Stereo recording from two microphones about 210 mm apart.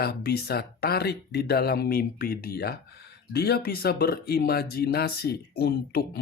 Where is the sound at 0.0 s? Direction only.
50° left (ahead or behind).